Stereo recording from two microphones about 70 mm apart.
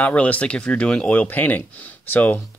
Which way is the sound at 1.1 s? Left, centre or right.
Left.